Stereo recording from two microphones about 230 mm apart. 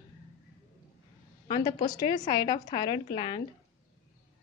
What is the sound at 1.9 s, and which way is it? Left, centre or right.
Speech, centre.